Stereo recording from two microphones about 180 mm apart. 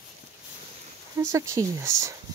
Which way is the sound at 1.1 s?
15° right (ahead or behind).